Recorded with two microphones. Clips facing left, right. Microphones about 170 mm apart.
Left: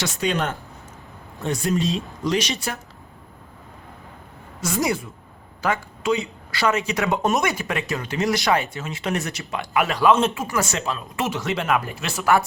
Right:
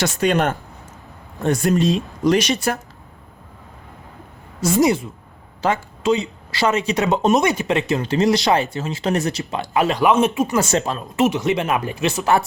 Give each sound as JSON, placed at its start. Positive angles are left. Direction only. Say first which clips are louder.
{"t": 0.2, "sound": "speech", "louder": "right 5 dB", "side_deg": -55}
{"t": 1.4, "sound": "speech", "louder": "right 5 dB", "side_deg": -65}
{"t": 2.5, "sound": "speech", "louder": "right 8 dB", "side_deg": -45}
{"t": 4.6, "sound": "speech", "louder": "right 7 dB", "side_deg": -25}
{"t": 10.7, "sound": "speech", "louder": "right 6 dB", "side_deg": -40}
{"t": 11.2, "sound": "speech", "louder": "right 8 dB", "side_deg": -20}